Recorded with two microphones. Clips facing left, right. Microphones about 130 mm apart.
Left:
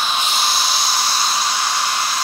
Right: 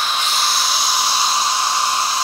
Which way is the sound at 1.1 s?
25° right (ahead or behind).